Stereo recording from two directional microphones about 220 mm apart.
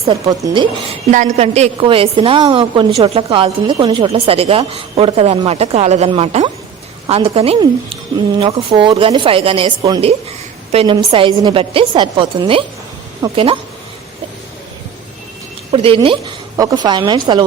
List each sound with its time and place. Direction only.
0.3 s a woman's voice: 20° right (ahead or behind)
1.1 s a woman's voice: 35° right (ahead or behind)
15.7 s a woman's voice: 25° right (ahead or behind)